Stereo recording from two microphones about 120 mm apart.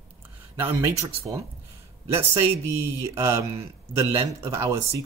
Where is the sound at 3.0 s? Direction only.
25° right (ahead or behind).